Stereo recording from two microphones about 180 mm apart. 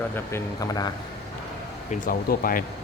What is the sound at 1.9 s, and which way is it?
Speech, 50° left (ahead or behind).